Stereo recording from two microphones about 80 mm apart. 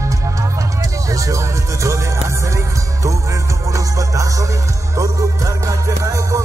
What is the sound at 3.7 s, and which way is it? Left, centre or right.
Music, right.